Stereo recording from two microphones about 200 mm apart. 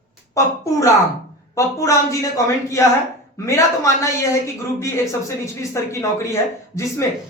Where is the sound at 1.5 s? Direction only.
15° left (ahead or behind).